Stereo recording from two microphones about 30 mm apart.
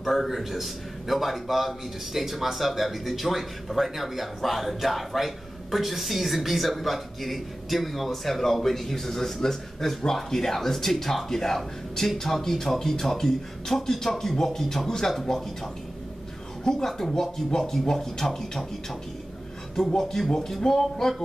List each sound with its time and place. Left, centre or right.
0.0 s a man's voice: centre
19.7 s a man's voice: left